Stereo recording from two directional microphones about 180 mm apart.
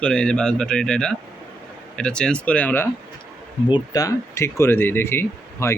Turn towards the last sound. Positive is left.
turn(degrees=15)  # may be behind; listen again after turning